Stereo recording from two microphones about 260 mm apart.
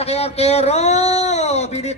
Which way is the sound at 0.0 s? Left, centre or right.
Left.